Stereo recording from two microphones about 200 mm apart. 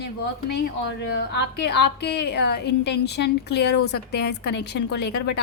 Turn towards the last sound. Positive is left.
turn(degrees=55)  # may be behind; listen again after turning